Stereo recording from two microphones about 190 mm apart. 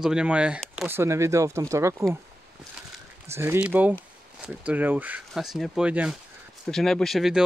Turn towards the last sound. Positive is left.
turn(degrees=0)  # may be behind; listen again after turning